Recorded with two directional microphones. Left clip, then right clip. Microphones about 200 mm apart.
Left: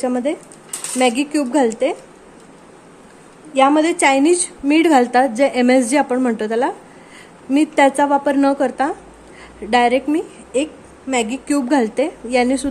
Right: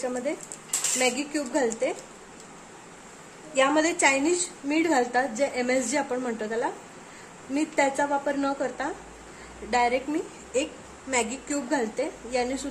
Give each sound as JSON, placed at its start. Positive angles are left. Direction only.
{"t": 0.0, "sound": "a woman's voice", "side_deg": 45}
{"t": 3.5, "sound": "a woman's voice", "side_deg": 40}